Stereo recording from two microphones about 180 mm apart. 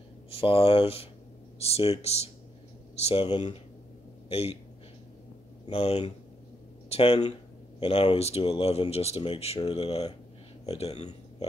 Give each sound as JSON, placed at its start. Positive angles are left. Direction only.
{"t": 0.3, "sound": "speech", "side_deg": 30}
{"t": 5.7, "sound": "speech", "side_deg": 35}